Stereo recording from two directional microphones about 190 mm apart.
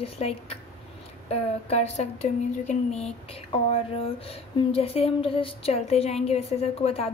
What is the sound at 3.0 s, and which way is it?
A woman's voice, 30° left (ahead or behind).